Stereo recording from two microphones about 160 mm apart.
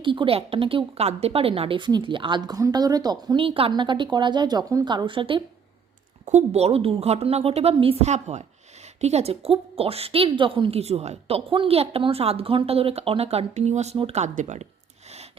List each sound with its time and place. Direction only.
0.0 s a woman's voice: 30° right (ahead or behind)
6.2 s a woman's voice: 45° right (ahead or behind)